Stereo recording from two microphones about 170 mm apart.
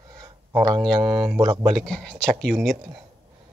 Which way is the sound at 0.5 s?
20° right (ahead or behind).